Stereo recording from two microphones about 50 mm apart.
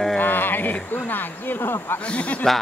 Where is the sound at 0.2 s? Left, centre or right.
Left.